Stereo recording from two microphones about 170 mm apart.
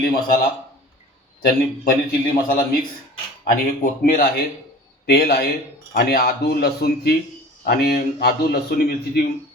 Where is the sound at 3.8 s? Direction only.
60° left (ahead or behind).